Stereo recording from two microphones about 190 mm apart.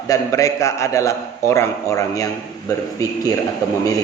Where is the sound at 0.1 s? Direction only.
15° left (ahead or behind).